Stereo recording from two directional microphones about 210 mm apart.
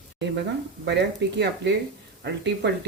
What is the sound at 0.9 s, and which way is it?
Speech, 55° right (ahead or behind).